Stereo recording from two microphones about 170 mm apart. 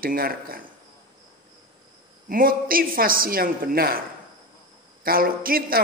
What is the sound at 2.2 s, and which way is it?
A man's voice, 55° right (ahead or behind).